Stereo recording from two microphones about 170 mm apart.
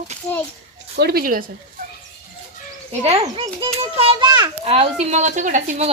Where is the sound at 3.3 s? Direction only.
30° right (ahead or behind).